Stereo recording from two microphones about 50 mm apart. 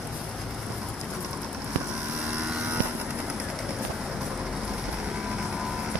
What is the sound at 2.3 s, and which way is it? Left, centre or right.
Vehicle, right.